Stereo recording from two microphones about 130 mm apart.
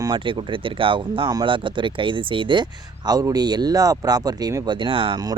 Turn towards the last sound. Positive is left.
turn(degrees=-40)  # may be behind; listen again after turning